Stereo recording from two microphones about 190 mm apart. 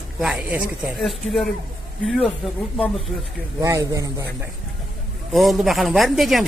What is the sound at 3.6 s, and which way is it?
Speech, 15° right (ahead or behind).